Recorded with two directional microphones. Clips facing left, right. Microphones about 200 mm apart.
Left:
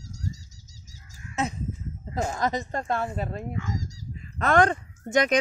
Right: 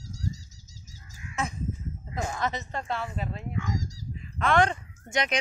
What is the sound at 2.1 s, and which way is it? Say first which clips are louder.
Speech: left 4 dB; 40° left (ahead or behind).